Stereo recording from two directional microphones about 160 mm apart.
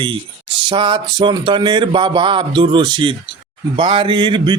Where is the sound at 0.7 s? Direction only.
30° right (ahead or behind).